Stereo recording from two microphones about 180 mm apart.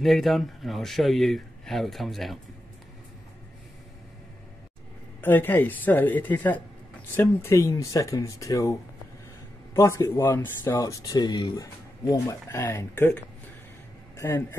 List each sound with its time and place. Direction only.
0.0 s speech: centre (ahead or behind)
5.2 s speech: 10° left (ahead or behind)
9.8 s a man's voice: 15° left (ahead or behind)